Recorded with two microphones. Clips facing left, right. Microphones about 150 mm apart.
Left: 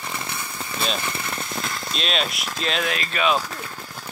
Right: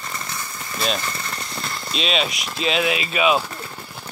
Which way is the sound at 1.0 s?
10° left (ahead or behind).